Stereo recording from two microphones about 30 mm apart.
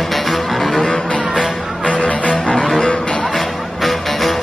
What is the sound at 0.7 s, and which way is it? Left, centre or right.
Music, left.